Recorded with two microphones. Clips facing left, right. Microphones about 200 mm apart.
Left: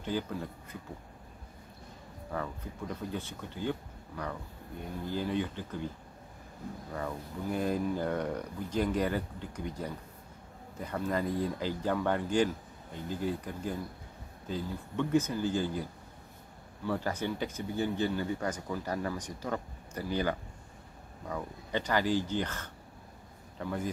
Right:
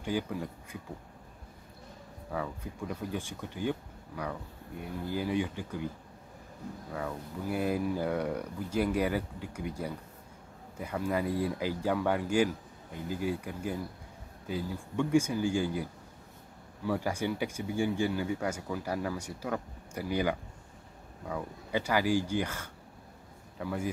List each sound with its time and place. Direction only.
0.0 s speech: 10° right (ahead or behind)
2.3 s speech: 10° right (ahead or behind)
6.9 s speech: 5° right (ahead or behind)